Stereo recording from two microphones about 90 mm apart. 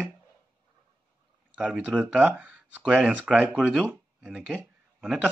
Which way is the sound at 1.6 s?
15° right (ahead or behind).